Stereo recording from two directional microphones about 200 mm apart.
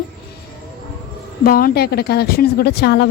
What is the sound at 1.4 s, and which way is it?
A woman's voice, 50° left (ahead or behind).